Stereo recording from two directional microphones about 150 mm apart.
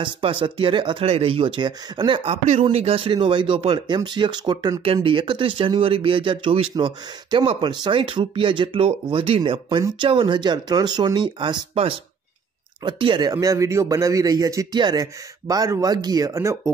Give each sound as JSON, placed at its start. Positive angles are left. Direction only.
{"t": 0.0, "sound": "speech", "side_deg": -35}
{"t": 4.8, "sound": "speech", "side_deg": -35}